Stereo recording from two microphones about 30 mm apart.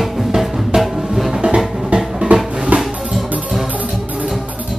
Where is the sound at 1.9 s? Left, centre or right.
Right.